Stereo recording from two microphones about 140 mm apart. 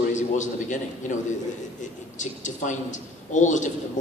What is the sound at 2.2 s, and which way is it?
A man's voice, 60° left (ahead or behind).